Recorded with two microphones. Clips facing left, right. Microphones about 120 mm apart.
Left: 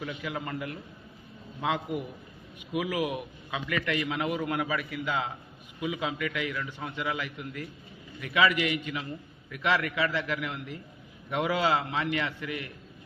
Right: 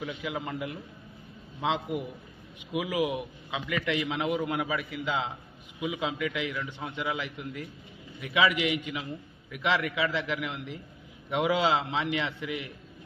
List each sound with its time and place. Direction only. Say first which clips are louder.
0.2 s a man's voice: right 1 dB; 15° right (ahead or behind)